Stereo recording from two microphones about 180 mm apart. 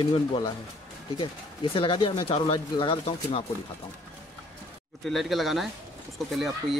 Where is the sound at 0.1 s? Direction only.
30° left (ahead or behind).